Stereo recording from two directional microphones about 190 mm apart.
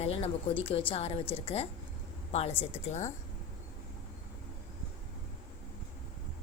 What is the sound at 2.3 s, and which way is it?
Speech, 30° left (ahead or behind).